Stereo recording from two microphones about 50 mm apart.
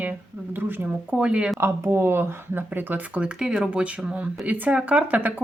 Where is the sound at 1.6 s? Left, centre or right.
Right.